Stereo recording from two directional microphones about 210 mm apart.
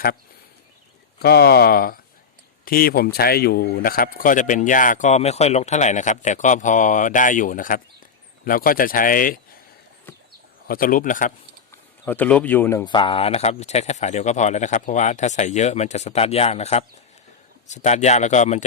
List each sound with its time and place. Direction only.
1.2 s speech: 50° left (ahead or behind)
10.7 s speech: 40° left (ahead or behind)
11.7 s speech: 10° left (ahead or behind); by 18.6 s 35° left (ahead or behind)